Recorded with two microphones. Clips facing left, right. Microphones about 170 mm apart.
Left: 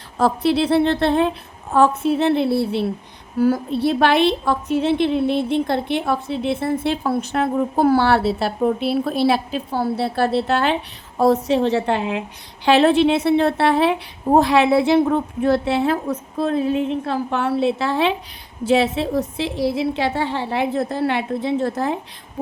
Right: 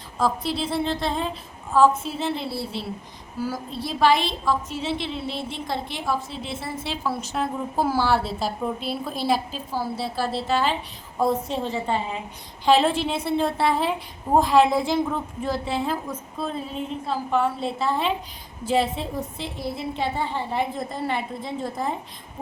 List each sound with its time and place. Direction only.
0.2 s a woman's voice: 65° left (ahead or behind)
11.2 s a woman's voice: 80° left